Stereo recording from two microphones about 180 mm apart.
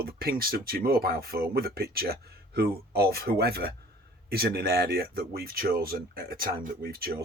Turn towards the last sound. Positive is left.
turn(degrees=-60)  # may be behind; listen again after turning